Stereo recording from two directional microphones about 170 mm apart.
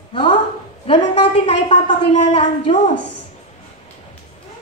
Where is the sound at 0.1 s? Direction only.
30° left (ahead or behind).